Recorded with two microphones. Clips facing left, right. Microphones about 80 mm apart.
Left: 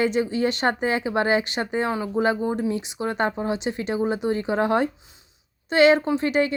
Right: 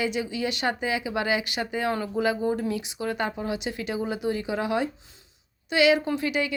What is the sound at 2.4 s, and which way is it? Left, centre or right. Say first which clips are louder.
A woman's voice: left 2 dB; left.